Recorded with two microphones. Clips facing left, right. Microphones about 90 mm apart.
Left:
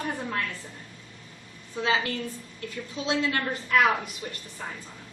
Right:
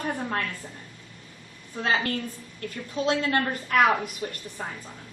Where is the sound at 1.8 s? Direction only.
45° right (ahead or behind).